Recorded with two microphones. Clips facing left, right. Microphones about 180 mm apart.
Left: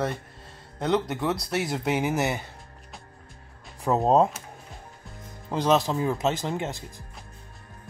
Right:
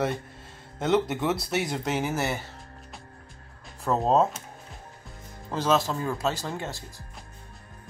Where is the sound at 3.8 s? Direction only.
15° left (ahead or behind).